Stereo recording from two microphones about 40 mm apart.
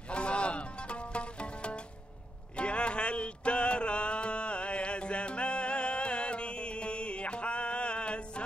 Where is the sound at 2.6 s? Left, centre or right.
Left.